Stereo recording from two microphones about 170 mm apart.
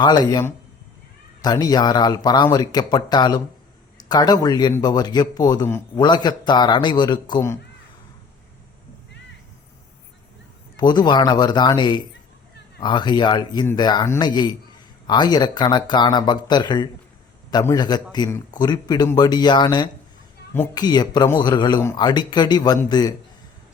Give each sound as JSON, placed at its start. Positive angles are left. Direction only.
{"t": 0.0, "sound": "speech", "side_deg": 25}
{"t": 10.8, "sound": "speech", "side_deg": 25}